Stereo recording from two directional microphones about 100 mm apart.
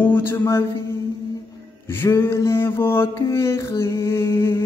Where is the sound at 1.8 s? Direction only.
25° left (ahead or behind).